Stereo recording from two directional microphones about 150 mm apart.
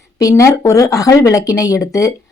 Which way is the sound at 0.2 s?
20° left (ahead or behind).